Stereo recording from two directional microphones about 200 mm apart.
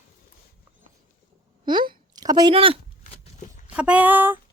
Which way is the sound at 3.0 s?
40° left (ahead or behind).